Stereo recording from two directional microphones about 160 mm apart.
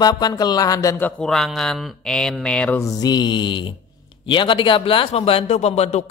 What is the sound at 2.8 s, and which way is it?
Speech, 25° left (ahead or behind).